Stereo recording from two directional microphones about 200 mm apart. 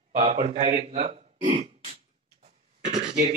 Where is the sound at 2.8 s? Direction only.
35° right (ahead or behind).